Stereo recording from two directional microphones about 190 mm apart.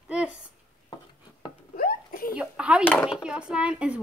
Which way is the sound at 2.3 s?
5° right (ahead or behind).